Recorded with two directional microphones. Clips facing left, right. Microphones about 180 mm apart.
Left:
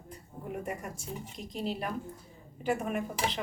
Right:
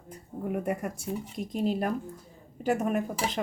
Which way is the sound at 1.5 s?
45° right (ahead or behind).